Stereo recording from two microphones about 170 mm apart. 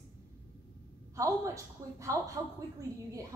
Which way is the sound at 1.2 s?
20° right (ahead or behind).